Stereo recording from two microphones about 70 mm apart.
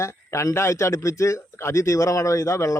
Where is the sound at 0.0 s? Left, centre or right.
Left.